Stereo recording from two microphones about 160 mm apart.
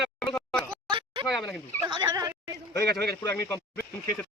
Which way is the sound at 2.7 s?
15° left (ahead or behind).